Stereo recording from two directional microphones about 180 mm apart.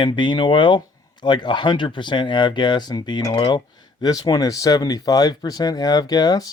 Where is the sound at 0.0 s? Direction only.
25° left (ahead or behind).